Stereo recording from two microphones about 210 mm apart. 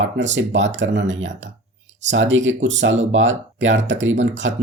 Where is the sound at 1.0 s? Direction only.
65° right (ahead or behind).